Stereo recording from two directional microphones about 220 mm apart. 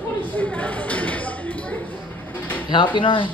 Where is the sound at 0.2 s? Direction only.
10° left (ahead or behind).